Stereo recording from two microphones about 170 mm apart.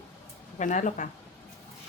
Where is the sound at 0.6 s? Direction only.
45° left (ahead or behind).